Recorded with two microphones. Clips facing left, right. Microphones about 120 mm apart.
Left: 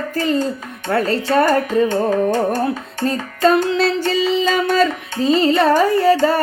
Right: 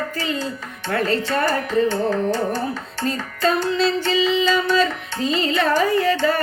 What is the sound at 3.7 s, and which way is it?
Child singing, 70° left (ahead or behind).